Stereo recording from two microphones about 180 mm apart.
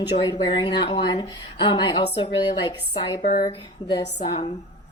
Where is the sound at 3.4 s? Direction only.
25° left (ahead or behind).